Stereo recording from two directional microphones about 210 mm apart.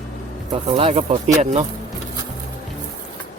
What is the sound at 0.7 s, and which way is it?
Speech, 25° right (ahead or behind).